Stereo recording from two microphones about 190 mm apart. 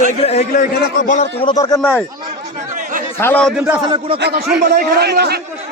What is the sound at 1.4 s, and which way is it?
Speech, 25° left (ahead or behind).